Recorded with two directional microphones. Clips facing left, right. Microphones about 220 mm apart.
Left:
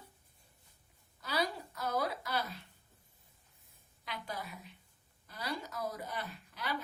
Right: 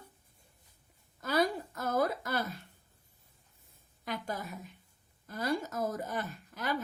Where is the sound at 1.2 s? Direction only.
50° right (ahead or behind).